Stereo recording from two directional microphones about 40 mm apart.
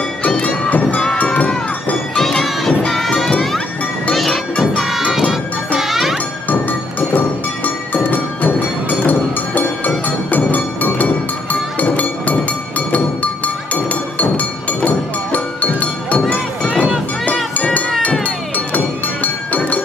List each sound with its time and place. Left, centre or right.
0.7 s music: left
2.1 s music: centre
2.8 s crowd: centre
4.1 s music: centre
5.8 s jingle: centre
7.2 s music: left
11.8 s glass: left
14.1 s music: left
19.2 s music: left